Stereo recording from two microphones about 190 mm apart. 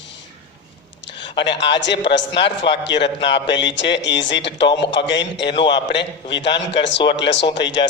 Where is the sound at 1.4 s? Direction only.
70° left (ahead or behind).